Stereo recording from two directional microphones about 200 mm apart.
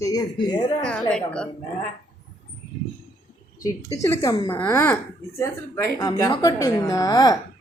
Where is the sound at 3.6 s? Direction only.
15° left (ahead or behind).